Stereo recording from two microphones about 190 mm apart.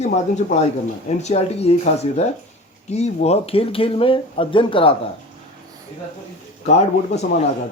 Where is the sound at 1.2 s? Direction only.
35° left (ahead or behind).